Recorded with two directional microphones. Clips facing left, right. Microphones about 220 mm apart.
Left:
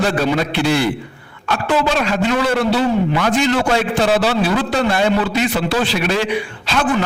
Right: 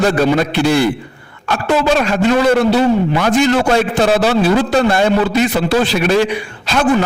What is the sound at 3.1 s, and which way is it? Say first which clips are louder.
A man's voice: right 3 dB; 45° right (ahead or behind).